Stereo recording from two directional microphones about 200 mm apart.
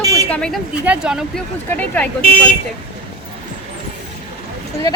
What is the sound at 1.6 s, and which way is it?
Speech, 5° left (ahead or behind).